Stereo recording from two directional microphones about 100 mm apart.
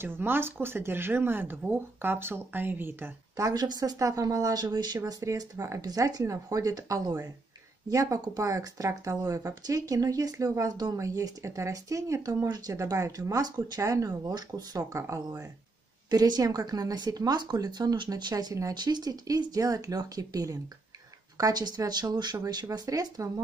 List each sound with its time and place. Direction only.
0.0 s speech: 20° right (ahead or behind)
3.3 s speech: 40° right (ahead or behind)
16.1 s speech: 40° right (ahead or behind)
18.3 s speech: 35° right (ahead or behind)